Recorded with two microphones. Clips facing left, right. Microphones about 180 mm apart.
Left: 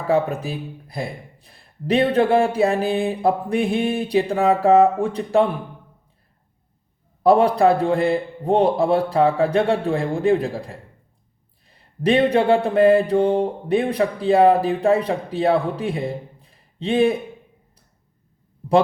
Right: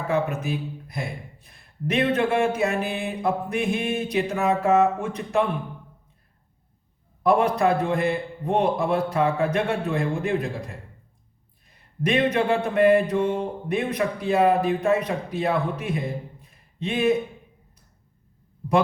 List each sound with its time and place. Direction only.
0.1 s mantra: 35° left (ahead or behind)
7.2 s mantra: 30° left (ahead or behind)